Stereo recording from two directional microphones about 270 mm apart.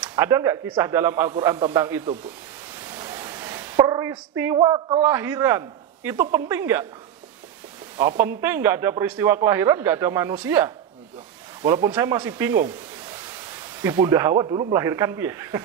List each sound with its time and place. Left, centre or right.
0.0 s a man's voice: centre
2.8 s a sound: centre
4.6 s a man's voice: centre
8.1 s speech: right
8.4 s a man's voice: centre
13.7 s a man's voice: centre